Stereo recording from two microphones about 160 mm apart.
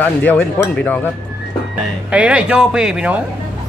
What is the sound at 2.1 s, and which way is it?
Speech, 5° right (ahead or behind).